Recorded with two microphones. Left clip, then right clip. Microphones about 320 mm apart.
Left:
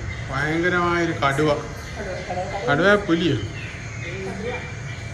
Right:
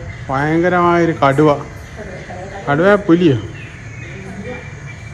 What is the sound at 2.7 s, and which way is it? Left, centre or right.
Speech, centre.